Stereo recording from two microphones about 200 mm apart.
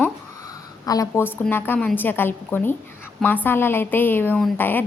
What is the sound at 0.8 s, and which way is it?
A woman's voice, 15° left (ahead or behind).